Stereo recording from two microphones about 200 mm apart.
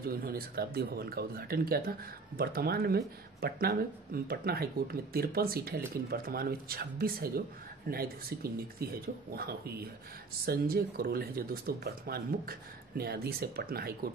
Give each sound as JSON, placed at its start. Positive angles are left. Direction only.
{"t": 0.0, "sound": "speech", "side_deg": -50}